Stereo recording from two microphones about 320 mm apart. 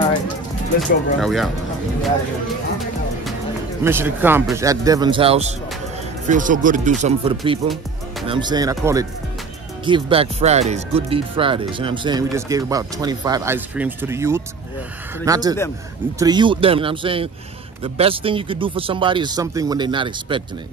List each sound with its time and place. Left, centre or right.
0.7 s speech: centre
3.8 s speech: centre